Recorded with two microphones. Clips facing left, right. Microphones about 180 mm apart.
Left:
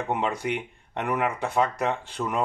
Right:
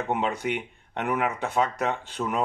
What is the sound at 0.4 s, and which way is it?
Speech, centre (ahead or behind).